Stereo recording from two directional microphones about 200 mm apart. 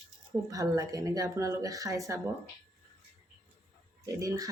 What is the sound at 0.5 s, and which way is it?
Speech, 15° right (ahead or behind).